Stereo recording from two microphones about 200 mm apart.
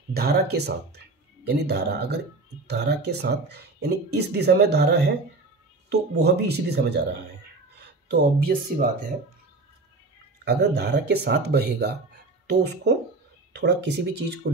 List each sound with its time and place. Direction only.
0.1 s speech: 50° right (ahead or behind)
8.1 s speech: 50° right (ahead or behind)
10.4 s speech: 55° right (ahead or behind)
13.5 s a sound: 60° right (ahead or behind)
14.4 s speech: 60° right (ahead or behind)